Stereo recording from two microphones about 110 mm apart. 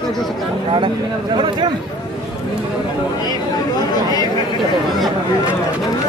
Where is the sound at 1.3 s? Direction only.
45° right (ahead or behind).